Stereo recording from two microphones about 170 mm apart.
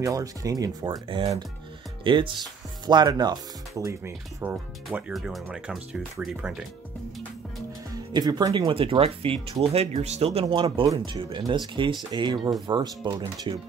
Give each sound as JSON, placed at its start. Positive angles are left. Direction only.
{"t": 0.0, "sound": "speech", "side_deg": -20}
{"t": 7.9, "sound": "speech", "side_deg": -25}